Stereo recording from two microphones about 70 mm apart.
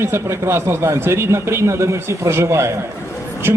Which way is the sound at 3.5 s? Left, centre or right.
Right.